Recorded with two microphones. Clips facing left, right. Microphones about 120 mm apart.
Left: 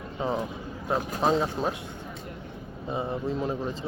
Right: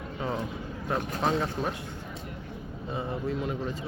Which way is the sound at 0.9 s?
15° left (ahead or behind).